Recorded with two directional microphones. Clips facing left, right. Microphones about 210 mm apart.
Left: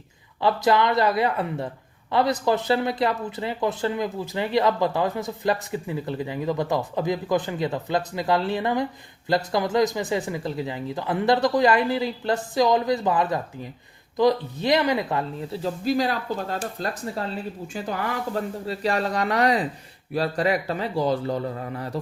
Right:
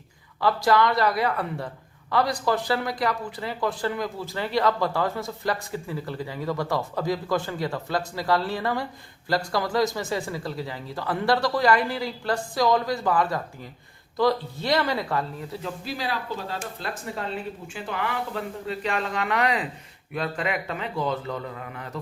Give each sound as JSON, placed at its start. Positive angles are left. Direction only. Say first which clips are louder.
{"t": 0.4, "sound": "a man's voice", "louder": "left 1 dB", "side_deg": 20}
{"t": 15.8, "sound": "speech", "louder": "left 10 dB", "side_deg": 45}